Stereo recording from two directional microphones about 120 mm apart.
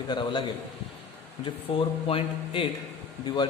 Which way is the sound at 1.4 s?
50° left (ahead or behind).